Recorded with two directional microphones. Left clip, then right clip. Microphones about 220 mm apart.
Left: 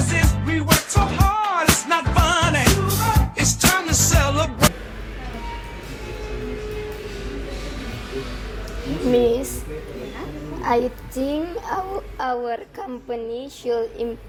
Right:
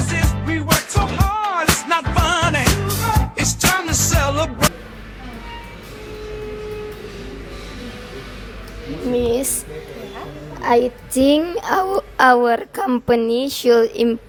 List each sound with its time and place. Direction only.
0.0 s music: centre (ahead or behind)
10.6 s child singing: 35° right (ahead or behind)
11.2 s a woman's voice: 45° right (ahead or behind)